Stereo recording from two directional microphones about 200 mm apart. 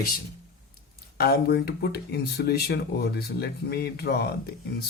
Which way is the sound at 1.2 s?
50° left (ahead or behind).